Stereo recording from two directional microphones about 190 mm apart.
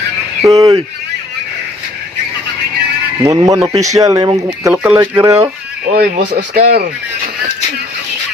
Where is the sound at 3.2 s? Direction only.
20° right (ahead or behind).